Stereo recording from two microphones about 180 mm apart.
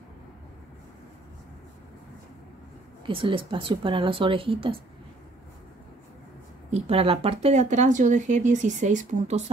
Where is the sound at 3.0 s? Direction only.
30° right (ahead or behind).